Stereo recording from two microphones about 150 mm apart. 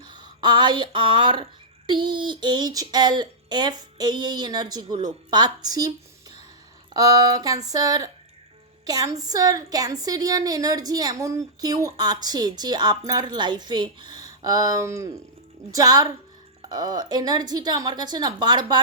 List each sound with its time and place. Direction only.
0.1 s a woman's voice: 30° right (ahead or behind)